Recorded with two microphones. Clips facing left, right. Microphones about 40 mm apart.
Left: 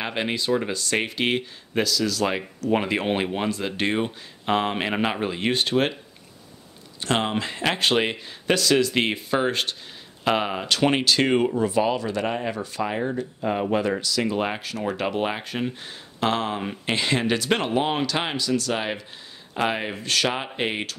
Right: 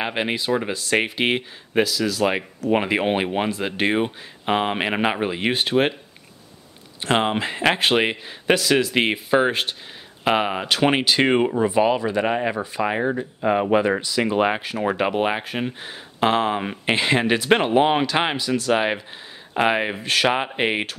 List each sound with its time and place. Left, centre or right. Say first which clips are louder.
0.0 s speech: right 2 dB; centre
7.0 s speech: right 3 dB; right